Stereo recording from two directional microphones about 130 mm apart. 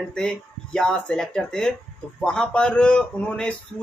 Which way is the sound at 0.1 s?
5° left (ahead or behind).